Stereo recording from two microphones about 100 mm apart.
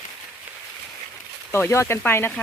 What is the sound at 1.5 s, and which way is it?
Speech, 25° left (ahead or behind).